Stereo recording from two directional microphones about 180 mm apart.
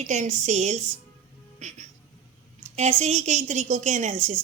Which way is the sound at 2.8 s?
35° right (ahead or behind).